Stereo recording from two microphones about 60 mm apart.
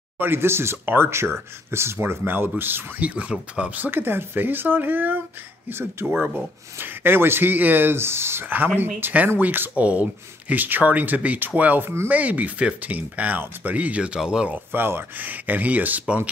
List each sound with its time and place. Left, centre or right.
0.2 s speech: right
3.0 s speech: right
3.8 s speech: right
8.5 s speech: right; by 14.5 s centre
14.5 s speech: right